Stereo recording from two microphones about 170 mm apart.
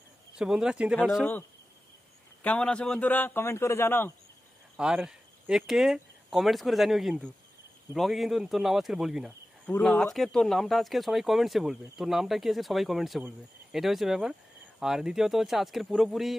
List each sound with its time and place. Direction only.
0.4 s speech: 5° right (ahead or behind)
2.4 s a man's voice: 5° left (ahead or behind)
4.7 s speech: 5° right (ahead or behind)